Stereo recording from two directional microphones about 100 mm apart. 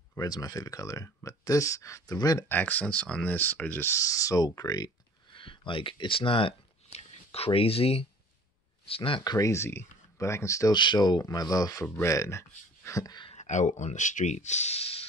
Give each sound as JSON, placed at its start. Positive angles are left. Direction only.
{"t": 0.2, "sound": "speech", "side_deg": 40}
{"t": 2.4, "sound": "speech", "side_deg": 20}
{"t": 3.9, "sound": "speech", "side_deg": 35}
{"t": 5.3, "sound": "speech", "side_deg": 55}
{"t": 8.8, "sound": "speech", "side_deg": 65}
{"t": 9.2, "sound": "speech", "side_deg": 40}
{"t": 9.5, "sound": "speech", "side_deg": 25}
{"t": 10.7, "sound": "speech", "side_deg": 50}
{"t": 14.2, "sound": "speech", "side_deg": 90}
{"t": 14.7, "sound": "a sound", "side_deg": 90}